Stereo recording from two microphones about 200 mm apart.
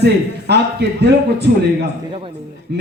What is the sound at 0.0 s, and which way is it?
Speech, 55° right (ahead or behind).